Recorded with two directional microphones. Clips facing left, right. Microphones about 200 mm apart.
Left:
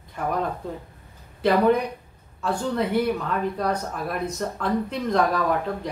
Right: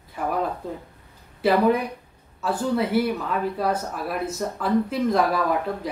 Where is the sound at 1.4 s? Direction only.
5° right (ahead or behind).